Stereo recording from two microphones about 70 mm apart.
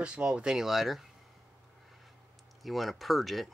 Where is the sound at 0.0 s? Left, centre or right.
Centre.